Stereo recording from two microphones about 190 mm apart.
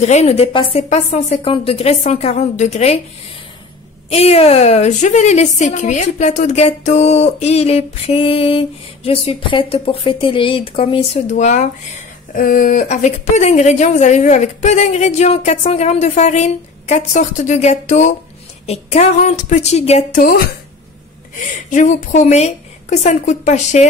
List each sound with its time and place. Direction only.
0.0 s a woman's voice: 35° left (ahead or behind)
4.1 s a woman's voice: 35° left (ahead or behind); by 20.4 s 50° left (ahead or behind)
21.6 s a woman's voice: 40° left (ahead or behind)